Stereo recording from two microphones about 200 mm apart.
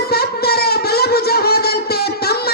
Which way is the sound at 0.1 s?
50° left (ahead or behind).